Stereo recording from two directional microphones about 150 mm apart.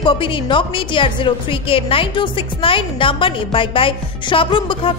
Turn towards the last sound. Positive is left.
turn(degrees=35)  # may be behind; listen again after turning